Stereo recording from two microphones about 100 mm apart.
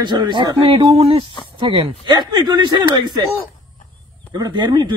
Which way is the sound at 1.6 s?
60° right (ahead or behind).